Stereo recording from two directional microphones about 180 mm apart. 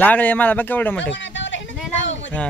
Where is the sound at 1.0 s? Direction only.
90° left.